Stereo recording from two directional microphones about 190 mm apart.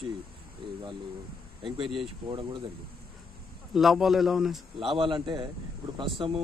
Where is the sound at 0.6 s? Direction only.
25° right (ahead or behind).